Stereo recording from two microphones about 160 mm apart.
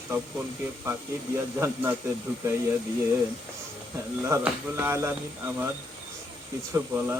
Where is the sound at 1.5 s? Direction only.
15° right (ahead or behind).